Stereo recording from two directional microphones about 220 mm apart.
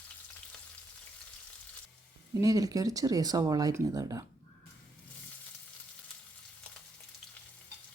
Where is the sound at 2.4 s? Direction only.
15° right (ahead or behind).